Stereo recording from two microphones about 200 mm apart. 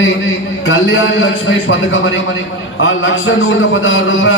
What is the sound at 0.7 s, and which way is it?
A man's voice, 75° left (ahead or behind).